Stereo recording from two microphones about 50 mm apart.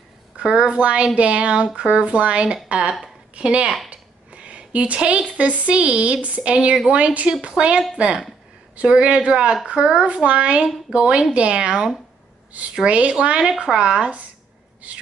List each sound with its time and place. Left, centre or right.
0.4 s speech: centre
3.9 s a sound: right
5.4 s speech: right